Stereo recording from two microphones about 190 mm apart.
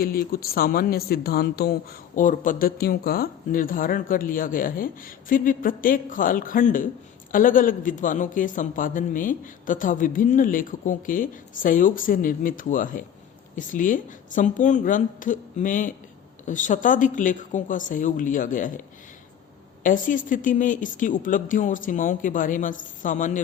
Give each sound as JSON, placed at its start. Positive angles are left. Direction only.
{"t": 0.0, "sound": "speech", "side_deg": 50}
{"t": 19.8, "sound": "speech", "side_deg": 45}